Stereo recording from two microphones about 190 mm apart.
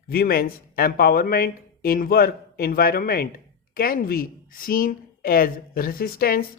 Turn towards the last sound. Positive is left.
turn(degrees=50)  # may be behind; listen again after turning